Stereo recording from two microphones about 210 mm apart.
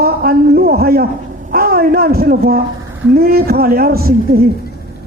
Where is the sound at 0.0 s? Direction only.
45° right (ahead or behind).